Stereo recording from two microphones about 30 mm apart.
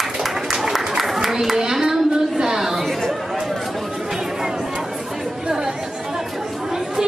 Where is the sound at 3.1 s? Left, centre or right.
Centre.